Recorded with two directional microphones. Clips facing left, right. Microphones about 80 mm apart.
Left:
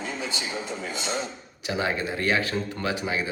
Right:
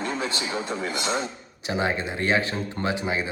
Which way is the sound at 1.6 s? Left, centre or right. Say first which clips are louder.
Right 1 dB; right.